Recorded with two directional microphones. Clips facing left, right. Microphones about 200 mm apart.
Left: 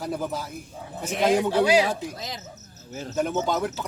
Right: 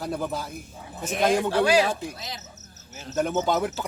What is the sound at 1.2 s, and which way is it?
Speech, 20° left (ahead or behind).